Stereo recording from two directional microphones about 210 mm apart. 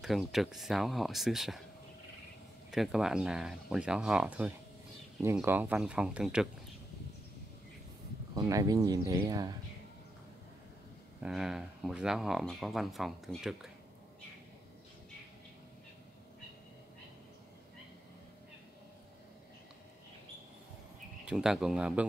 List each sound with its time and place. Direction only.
0.0 s speech: centre (ahead or behind)
2.7 s speech: centre (ahead or behind)
8.4 s speech: 15° right (ahead or behind)
11.2 s speech: centre (ahead or behind)
21.3 s speech: 5° right (ahead or behind)